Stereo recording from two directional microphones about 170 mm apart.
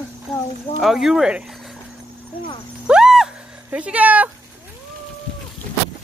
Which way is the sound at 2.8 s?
5° right (ahead or behind).